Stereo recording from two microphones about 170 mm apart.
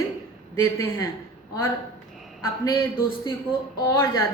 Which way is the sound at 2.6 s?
20° left (ahead or behind).